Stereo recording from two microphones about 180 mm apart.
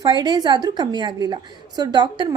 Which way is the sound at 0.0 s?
25° right (ahead or behind).